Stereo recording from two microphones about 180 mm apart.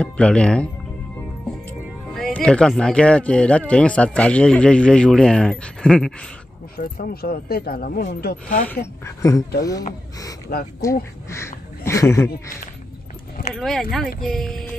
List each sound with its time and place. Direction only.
0.0 s speech: 5° left (ahead or behind)
2.1 s speech: centre (ahead or behind)
6.8 s speech: 55° left (ahead or behind)
8.6 s speech: 15° left (ahead or behind)
13.6 s speech: centre (ahead or behind)